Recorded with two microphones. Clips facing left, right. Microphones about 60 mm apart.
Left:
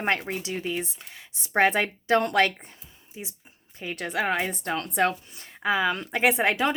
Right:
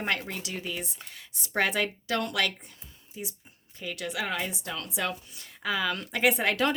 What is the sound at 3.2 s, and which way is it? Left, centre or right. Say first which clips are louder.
Speech: right 1 dB; left.